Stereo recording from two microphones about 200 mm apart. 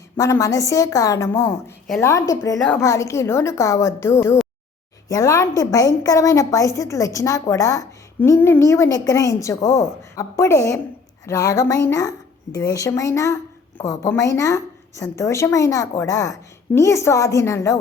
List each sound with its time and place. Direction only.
0.2 s a woman's voice: 15° left (ahead or behind)